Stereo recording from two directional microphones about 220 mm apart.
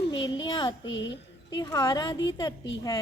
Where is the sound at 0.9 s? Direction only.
55° left (ahead or behind).